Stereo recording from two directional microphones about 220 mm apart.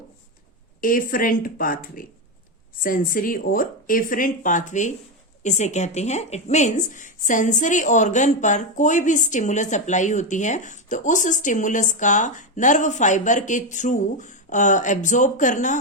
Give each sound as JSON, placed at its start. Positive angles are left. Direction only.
{"t": 0.8, "sound": "speech", "side_deg": 40}